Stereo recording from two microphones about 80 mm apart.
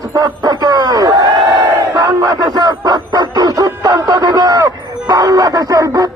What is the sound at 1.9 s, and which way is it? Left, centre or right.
Bow-wow, right.